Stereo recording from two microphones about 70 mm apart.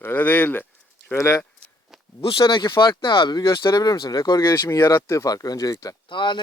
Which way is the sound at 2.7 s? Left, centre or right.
Left.